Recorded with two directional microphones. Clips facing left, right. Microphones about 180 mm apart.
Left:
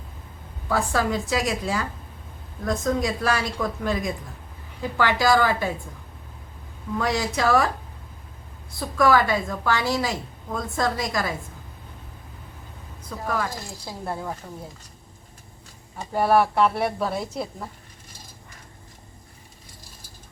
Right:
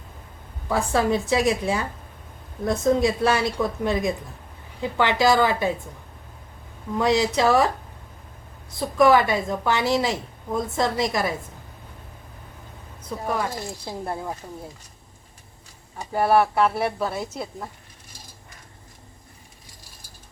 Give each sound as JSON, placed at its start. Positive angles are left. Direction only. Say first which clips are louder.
{"t": 0.7, "sound": "a woman's voice", "louder": "right 2 dB", "side_deg": -25}
{"t": 7.0, "sound": "a woman's voice", "louder": "right 4 dB", "side_deg": -20}
{"t": 8.8, "sound": "a woman's voice", "louder": "right 3 dB", "side_deg": -20}
{"t": 13.1, "sound": "a woman's voice", "louder": "right 1 dB", "side_deg": -20}
{"t": 16.1, "sound": "a woman's voice", "louder": "even", "side_deg": 0}